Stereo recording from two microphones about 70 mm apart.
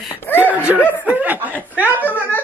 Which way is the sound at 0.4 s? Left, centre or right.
Right.